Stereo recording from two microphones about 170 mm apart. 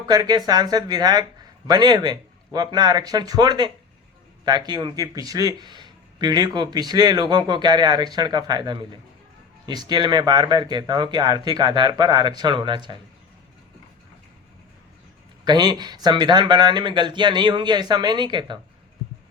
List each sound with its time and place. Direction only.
0.1 s speech: 25° right (ahead or behind)
15.4 s speech: 25° right (ahead or behind)